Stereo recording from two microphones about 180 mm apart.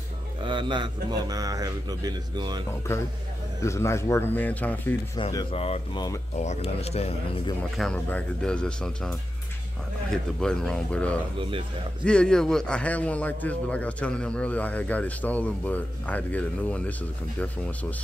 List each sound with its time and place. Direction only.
0.4 s speech: 25° right (ahead or behind)
3.6 s a man's voice: 15° left (ahead or behind)
5.1 s speech: 25° left (ahead or behind)
7.7 s speech: 5° left (ahead or behind)
10.1 s a man's voice: 5° left (ahead or behind)